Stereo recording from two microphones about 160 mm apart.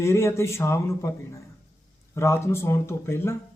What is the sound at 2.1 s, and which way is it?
A man's voice, 15° left (ahead or behind).